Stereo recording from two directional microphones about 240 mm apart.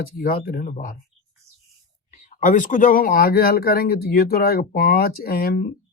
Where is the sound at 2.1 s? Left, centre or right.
Left.